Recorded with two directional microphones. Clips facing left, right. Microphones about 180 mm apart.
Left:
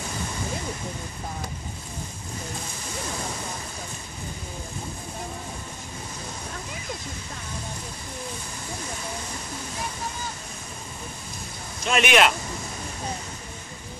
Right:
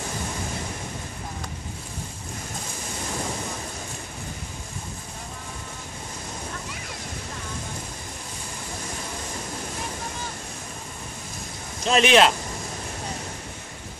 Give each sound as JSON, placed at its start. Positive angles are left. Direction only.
{"t": 11.8, "sound": "speech", "side_deg": -35}